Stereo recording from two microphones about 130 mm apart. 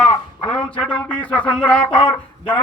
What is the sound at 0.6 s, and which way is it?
Speech, 10° left (ahead or behind).